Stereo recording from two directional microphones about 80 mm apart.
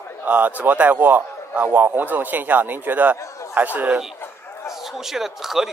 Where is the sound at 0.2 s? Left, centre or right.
Right.